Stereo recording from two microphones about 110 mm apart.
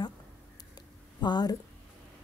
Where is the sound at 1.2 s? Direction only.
40° left (ahead or behind).